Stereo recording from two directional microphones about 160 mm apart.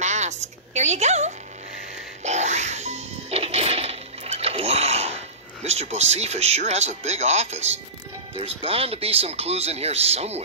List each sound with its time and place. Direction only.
0.0 s a sound: 45° right (ahead or behind)
2.2 s music: 45° right (ahead or behind)
8.4 s speech: 35° right (ahead or behind)